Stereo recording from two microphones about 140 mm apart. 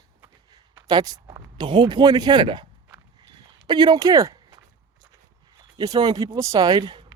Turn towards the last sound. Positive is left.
turn(degrees=-35)  # may be behind; listen again after turning